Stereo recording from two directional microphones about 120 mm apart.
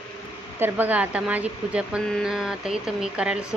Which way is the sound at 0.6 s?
15° right (ahead or behind).